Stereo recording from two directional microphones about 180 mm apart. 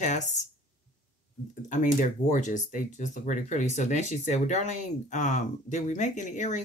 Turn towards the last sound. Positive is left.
turn(degrees=40)  # may be behind; listen again after turning